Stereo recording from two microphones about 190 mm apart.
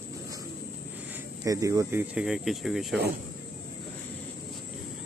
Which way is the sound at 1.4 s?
15° right (ahead or behind).